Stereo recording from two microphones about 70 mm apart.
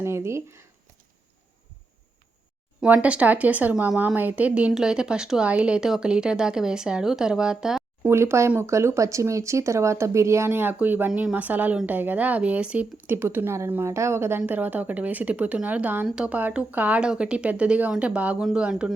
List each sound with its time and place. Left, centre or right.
0.0 s speech: right
2.8 s speech: right; by 7.9 s centre
8.0 s speech: right; by 12.9 s centre
13.1 s a woman's voice: right
16.1 s speech: centre